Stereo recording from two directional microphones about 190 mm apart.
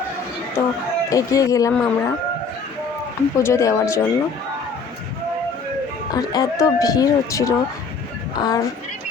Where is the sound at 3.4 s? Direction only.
15° left (ahead or behind).